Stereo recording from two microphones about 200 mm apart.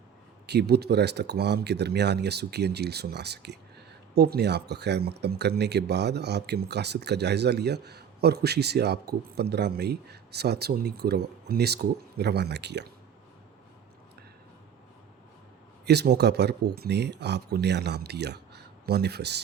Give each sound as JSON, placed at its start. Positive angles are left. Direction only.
{"t": 0.4, "sound": "speech", "side_deg": -55}
{"t": 15.9, "sound": "speech", "side_deg": -55}